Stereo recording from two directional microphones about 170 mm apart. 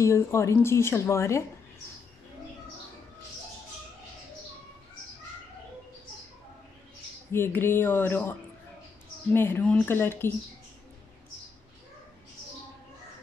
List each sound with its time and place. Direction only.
0.0 s speech: 15° left (ahead or behind)
7.3 s speech: 15° left (ahead or behind)